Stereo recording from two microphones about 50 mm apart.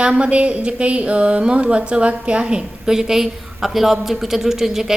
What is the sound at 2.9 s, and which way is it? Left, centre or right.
A woman's voice, centre.